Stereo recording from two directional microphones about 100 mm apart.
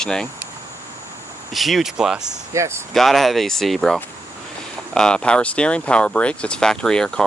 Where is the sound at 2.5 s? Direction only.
30° right (ahead or behind).